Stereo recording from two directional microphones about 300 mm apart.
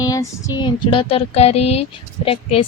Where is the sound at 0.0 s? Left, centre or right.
Centre.